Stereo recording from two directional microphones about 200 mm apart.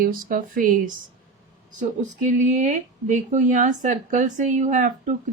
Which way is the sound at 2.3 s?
40° right (ahead or behind).